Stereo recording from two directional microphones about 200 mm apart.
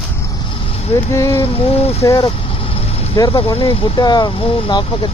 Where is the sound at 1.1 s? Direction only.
15° left (ahead or behind).